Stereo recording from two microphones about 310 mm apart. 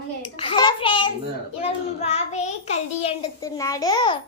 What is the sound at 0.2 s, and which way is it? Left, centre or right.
Hands, centre.